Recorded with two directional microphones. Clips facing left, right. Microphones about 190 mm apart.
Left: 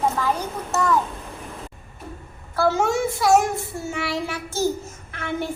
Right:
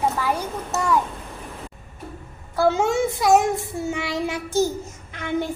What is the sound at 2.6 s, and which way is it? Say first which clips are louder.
Child singing: right 1 dB; 20° right (ahead or behind).